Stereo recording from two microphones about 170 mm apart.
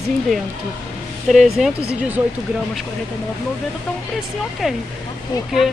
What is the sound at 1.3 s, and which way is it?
Speech, centre (ahead or behind).